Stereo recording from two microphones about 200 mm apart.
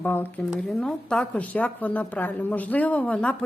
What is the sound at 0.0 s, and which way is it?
A woman's voice, 10° left (ahead or behind).